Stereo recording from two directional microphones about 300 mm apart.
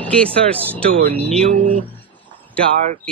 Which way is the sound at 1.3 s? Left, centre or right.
Right.